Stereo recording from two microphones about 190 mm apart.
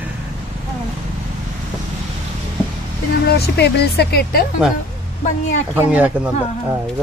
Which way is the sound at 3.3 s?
60° left (ahead or behind).